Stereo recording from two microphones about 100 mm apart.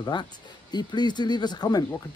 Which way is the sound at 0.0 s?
45° left (ahead or behind).